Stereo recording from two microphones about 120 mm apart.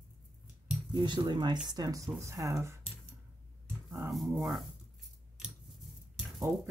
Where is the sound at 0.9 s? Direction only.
40° right (ahead or behind); by 2.8 s 25° right (ahead or behind).